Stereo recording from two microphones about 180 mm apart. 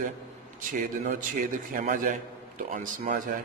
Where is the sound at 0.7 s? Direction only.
45° right (ahead or behind).